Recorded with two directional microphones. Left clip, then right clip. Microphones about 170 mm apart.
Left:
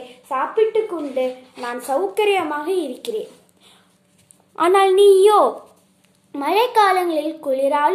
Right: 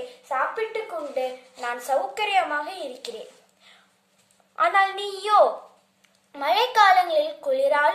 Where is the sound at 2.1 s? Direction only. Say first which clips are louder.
Left 4 dB; 30° left (ahead or behind).